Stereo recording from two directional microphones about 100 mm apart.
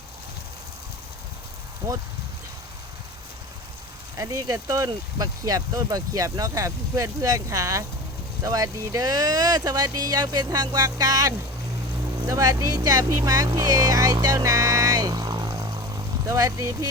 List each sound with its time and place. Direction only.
1.8 s speech: 35° right (ahead or behind)
4.2 s speech: 35° right (ahead or behind)